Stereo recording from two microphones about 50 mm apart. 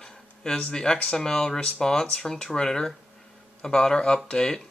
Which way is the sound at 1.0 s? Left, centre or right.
Centre.